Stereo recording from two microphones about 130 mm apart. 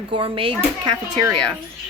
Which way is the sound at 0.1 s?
40° right (ahead or behind).